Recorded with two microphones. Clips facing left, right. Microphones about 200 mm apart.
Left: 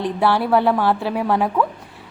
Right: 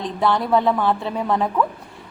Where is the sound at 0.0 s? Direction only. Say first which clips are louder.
Left 2 dB; 10° left (ahead or behind).